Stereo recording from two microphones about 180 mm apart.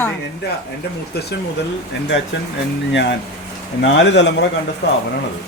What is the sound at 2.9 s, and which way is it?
Speech, 80° left.